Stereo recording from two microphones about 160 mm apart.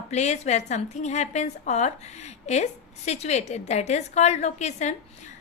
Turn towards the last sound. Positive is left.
turn(degrees=45)  # may be behind; listen again after turning